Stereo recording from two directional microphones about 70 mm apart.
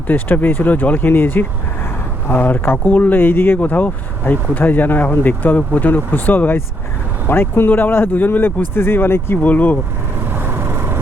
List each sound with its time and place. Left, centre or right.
0.1 s speech: left
9.4 s speech: left
10.3 s vehicle: right